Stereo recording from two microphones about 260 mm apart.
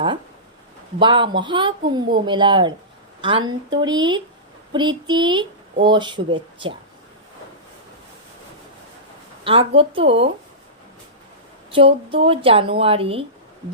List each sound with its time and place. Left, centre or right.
0.9 s speech: centre
9.4 s a woman's voice: right
11.7 s a woman's voice: right